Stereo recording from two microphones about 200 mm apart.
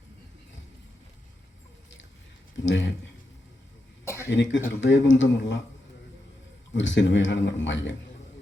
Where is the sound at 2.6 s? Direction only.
65° left (ahead or behind).